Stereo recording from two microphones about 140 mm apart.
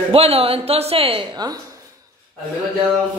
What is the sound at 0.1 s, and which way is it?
A woman's voice, 45° right (ahead or behind).